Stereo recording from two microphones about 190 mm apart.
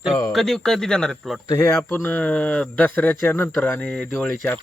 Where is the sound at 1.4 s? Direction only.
15° left (ahead or behind).